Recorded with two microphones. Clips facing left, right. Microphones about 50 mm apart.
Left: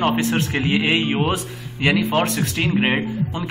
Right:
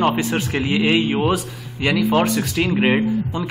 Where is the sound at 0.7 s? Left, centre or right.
Left.